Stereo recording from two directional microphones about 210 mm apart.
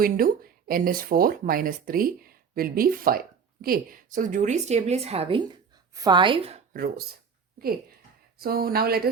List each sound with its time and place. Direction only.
0.0 s a woman's voice: 45° right (ahead or behind); by 6.6 s 25° right (ahead or behind)
6.7 s speech: 45° right (ahead or behind)
8.4 s speech: 45° right (ahead or behind)